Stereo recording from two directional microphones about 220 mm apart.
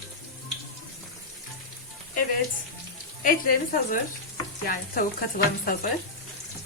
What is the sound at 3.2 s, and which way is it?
Speech, 40° left (ahead or behind).